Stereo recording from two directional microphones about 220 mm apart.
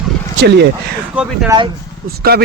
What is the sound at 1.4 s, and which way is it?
Speech, 20° right (ahead or behind).